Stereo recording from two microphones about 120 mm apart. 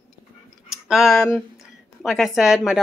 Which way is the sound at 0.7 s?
5° right (ahead or behind).